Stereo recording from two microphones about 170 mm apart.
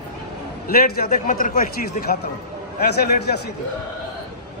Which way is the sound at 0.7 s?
60° left (ahead or behind).